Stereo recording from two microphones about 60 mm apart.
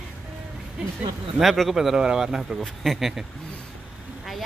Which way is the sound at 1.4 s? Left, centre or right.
Centre.